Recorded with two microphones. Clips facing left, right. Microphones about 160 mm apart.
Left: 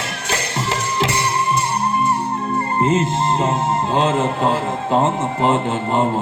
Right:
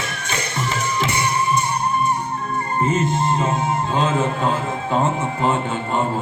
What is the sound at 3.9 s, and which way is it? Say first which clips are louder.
A man's voice: left 3 dB; 30° left (ahead or behind).